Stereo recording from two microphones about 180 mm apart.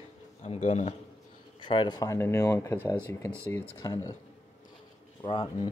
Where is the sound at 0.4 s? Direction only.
40° left (ahead or behind).